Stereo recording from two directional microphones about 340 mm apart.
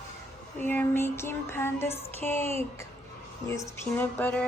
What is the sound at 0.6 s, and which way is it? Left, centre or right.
Female singing, centre.